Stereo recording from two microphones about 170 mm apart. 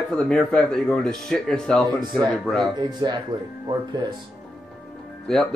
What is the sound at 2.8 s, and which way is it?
Speech, 25° right (ahead or behind).